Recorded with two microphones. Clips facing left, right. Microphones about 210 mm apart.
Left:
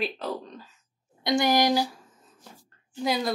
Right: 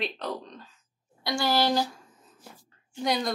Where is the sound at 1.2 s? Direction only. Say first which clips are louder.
Left 3 dB; 20° left (ahead or behind).